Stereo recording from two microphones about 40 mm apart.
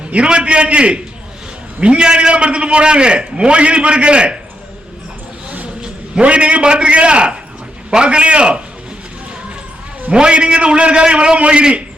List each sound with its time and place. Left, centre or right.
0.1 s a man's voice: right
5.8 s a man's voice: right
10.1 s a man's voice: right